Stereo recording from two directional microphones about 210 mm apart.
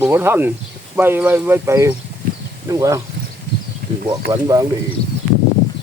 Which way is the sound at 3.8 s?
50° right (ahead or behind).